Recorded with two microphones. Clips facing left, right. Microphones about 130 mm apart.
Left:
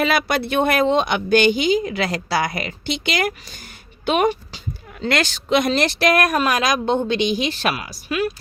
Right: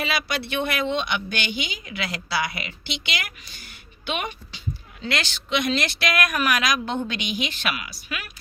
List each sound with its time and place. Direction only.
0.0 s speech: 55° left (ahead or behind); by 8.3 s 35° left (ahead or behind)